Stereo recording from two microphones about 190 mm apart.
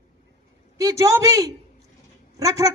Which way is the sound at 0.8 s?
15° right (ahead or behind).